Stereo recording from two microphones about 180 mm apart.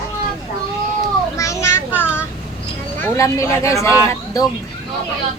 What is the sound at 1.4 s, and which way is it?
Children playing, 15° left (ahead or behind).